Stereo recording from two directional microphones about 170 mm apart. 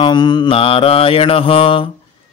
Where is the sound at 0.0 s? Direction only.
25° left (ahead or behind).